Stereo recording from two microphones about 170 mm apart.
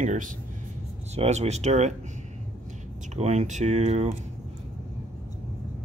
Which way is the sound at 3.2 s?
45° right (ahead or behind).